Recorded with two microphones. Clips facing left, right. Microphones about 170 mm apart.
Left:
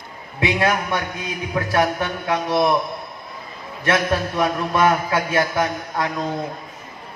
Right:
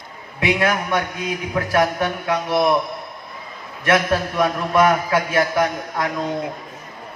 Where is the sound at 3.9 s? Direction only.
25° left (ahead or behind).